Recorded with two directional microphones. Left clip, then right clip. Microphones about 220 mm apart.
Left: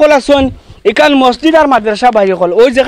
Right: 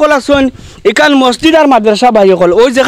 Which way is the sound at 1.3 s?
40° right (ahead or behind).